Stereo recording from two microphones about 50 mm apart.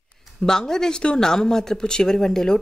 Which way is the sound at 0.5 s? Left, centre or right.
Centre.